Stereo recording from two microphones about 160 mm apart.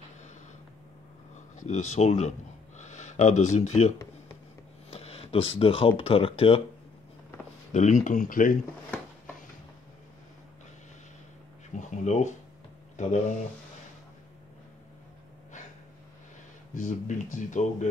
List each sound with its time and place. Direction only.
1.3 s speech: 50° left (ahead or behind)
4.9 s speech: 40° left (ahead or behind)
7.7 s speech: 50° left (ahead or behind)
11.7 s a sound: 50° left (ahead or behind)
12.9 s speech: 50° left (ahead or behind)
16.7 s speech: 50° left (ahead or behind)